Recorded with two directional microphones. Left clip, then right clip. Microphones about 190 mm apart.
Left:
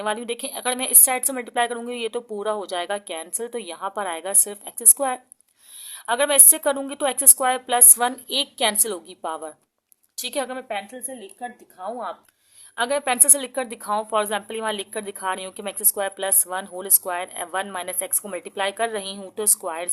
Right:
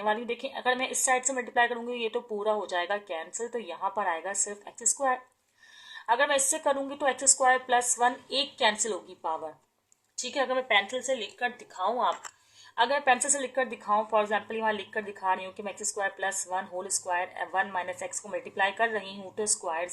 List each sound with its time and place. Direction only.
0.0 s a woman's voice: 60° left (ahead or behind)
10.7 s speech: 10° left (ahead or behind)
11.9 s speech: 25° left (ahead or behind)
12.7 s a woman's voice: 50° left (ahead or behind)